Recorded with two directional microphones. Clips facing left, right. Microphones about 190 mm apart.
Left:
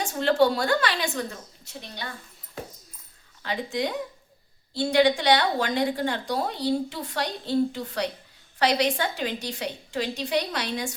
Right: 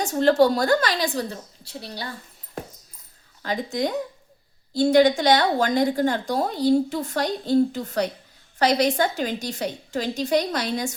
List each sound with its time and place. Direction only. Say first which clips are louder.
0.0 s a woman's voice: right 4 dB; 40° right (ahead or behind)
3.4 s speech: right 3 dB; 40° right (ahead or behind)